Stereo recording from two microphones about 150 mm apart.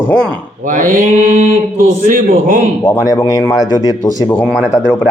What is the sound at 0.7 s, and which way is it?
Mantra, 60° right (ahead or behind).